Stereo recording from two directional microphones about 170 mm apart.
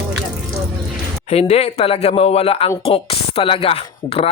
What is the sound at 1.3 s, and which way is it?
A man's voice, 40° left (ahead or behind).